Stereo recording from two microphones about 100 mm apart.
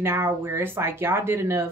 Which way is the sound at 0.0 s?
25° right (ahead or behind).